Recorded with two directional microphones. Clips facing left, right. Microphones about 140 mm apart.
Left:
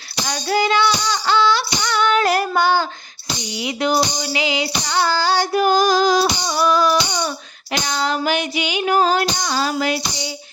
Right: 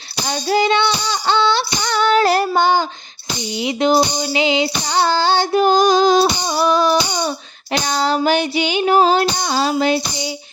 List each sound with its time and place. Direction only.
0.3 s music: 25° right (ahead or behind)
2.5 s a sound: 20° right (ahead or behind)
3.6 s female singing: 25° right (ahead or behind)
7.9 s child singing: 35° right (ahead or behind)
9.1 s female singing: 25° right (ahead or behind)